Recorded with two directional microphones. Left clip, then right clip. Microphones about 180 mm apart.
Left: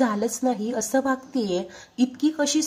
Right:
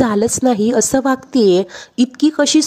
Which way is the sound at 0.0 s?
50° right (ahead or behind).